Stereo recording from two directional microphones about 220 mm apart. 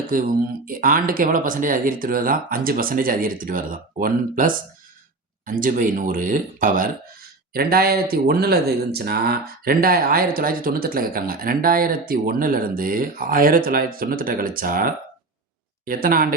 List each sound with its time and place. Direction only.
0.1 s speech: 40° right (ahead or behind)